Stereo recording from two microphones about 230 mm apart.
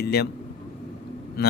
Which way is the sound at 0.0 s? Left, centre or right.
Left.